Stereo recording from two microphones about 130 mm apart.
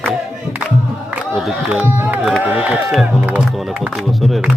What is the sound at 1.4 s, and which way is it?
Speech, centre (ahead or behind).